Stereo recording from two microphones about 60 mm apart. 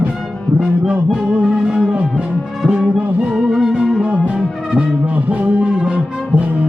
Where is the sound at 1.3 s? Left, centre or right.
Centre.